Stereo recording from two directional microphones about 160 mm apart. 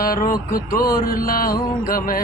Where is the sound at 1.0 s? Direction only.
65° left (ahead or behind).